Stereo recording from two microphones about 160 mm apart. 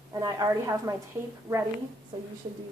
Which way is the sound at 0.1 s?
20° right (ahead or behind).